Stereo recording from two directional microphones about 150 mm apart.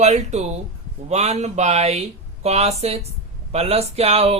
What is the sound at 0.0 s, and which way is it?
Speech, 45° right (ahead or behind).